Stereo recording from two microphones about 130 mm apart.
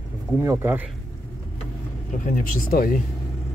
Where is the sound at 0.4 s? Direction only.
20° right (ahead or behind).